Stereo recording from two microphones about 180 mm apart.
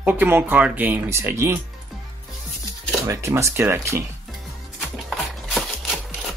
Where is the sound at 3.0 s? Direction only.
15° right (ahead or behind).